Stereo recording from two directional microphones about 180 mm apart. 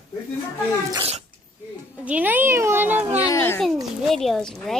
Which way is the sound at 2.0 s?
10° right (ahead or behind).